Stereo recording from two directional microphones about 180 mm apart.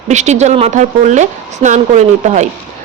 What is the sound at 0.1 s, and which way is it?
Speech, 40° right (ahead or behind).